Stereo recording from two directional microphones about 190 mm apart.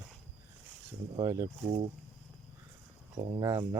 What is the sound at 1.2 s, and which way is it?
Speech, 15° right (ahead or behind).